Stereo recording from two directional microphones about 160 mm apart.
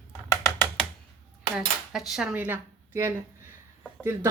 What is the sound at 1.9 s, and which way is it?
Speech, centre (ahead or behind).